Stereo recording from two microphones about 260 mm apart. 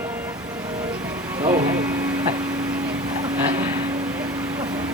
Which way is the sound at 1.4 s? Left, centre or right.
Centre.